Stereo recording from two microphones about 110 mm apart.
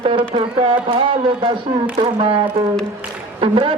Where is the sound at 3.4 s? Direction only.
50° right (ahead or behind).